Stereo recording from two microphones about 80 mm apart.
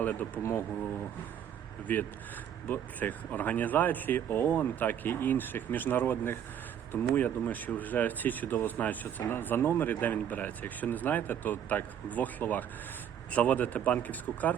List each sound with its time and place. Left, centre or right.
0.0 s speech: left
1.9 s speech: left